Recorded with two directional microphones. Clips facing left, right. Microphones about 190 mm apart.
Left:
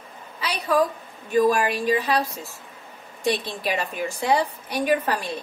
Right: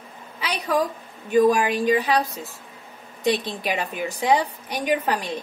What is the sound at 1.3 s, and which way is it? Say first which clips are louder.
Speech: right 2 dB; 15° right (ahead or behind).